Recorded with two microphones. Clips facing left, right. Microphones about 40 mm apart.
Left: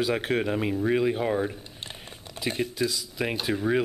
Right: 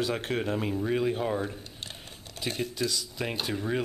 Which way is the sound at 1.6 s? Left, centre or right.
Left.